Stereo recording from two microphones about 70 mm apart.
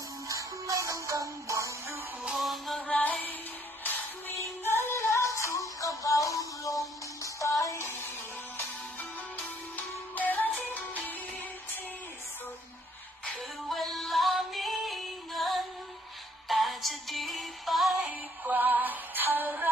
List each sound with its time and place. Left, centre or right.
0.3 s music: right
2.3 s music: centre
2.8 s music: centre
4.4 s music: left
10.2 s music: left
13.7 s music: centre
18.0 s music: right